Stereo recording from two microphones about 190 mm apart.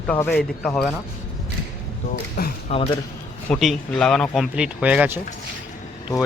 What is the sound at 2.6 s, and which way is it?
Speech, 35° left (ahead or behind).